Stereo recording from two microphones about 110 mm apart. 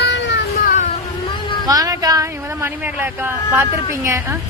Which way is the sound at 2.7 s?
20° right (ahead or behind).